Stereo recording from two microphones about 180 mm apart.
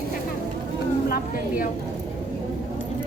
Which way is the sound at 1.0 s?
60° left (ahead or behind).